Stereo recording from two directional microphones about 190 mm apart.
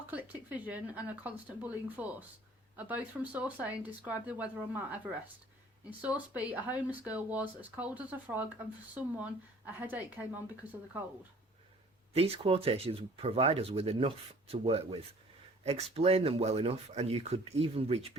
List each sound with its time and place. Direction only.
0.1 s speech: 10° right (ahead or behind)
12.1 s speech: 30° right (ahead or behind)